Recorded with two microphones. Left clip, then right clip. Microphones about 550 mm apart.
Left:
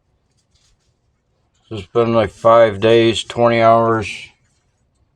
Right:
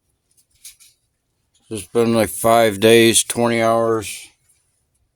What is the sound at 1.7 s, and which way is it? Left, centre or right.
Speech, right.